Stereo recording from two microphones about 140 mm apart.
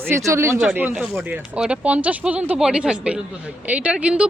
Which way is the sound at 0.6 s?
10° right (ahead or behind).